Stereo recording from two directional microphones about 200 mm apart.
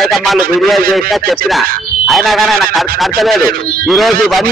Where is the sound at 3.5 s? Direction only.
45° right (ahead or behind).